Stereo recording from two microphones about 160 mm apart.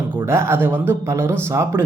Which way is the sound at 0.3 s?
15° right (ahead or behind).